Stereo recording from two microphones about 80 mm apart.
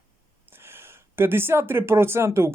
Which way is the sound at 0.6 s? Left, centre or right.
Right.